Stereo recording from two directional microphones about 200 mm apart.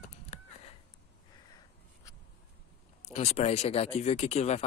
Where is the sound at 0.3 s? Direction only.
35° left (ahead or behind).